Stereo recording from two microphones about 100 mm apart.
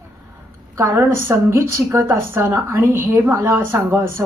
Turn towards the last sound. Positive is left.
turn(degrees=-25)  # may be behind; listen again after turning